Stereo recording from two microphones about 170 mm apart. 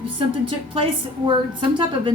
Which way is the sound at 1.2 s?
30° right (ahead or behind).